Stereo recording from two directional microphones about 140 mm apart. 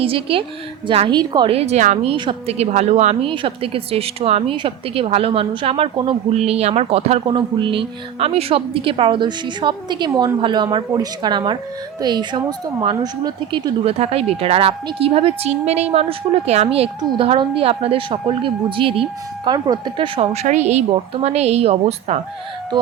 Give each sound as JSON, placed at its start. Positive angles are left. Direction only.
{"t": 0.0, "sound": "speech", "side_deg": -40}
{"t": 1.5, "sound": "speech", "side_deg": -50}
{"t": 2.1, "sound": "speech", "side_deg": -35}
{"t": 2.6, "sound": "speech", "side_deg": -55}
{"t": 3.2, "sound": "speech", "side_deg": -40}
{"t": 6.3, "sound": "speech", "side_deg": -50}
{"t": 7.3, "sound": "speech", "side_deg": -35}
{"t": 13.8, "sound": "speech", "side_deg": -45}
{"t": 19.5, "sound": "speech", "side_deg": -30}
{"t": 20.3, "sound": "speech", "side_deg": -55}